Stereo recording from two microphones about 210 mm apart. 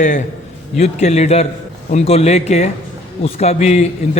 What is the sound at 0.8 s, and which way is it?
A man's voice, 30° left (ahead or behind).